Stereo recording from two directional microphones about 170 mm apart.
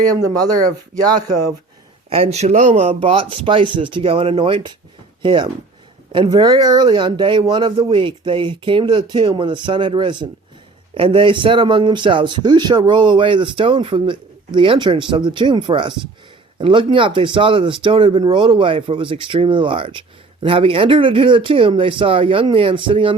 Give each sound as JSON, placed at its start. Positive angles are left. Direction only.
{"t": 0.0, "sound": "speech", "side_deg": -20}
{"t": 2.0, "sound": "speech", "side_deg": -35}